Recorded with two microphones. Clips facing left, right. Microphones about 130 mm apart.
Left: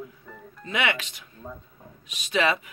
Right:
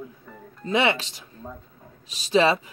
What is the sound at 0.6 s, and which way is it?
Speech, 30° right (ahead or behind).